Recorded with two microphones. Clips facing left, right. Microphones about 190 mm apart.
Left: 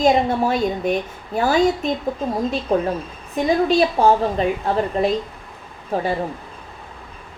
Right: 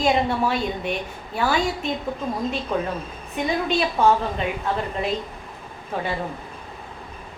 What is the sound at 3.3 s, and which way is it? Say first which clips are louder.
A woman's voice: left 6 dB; 35° left (ahead or behind).